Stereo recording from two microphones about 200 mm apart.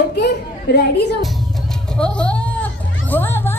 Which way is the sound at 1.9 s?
5° left (ahead or behind).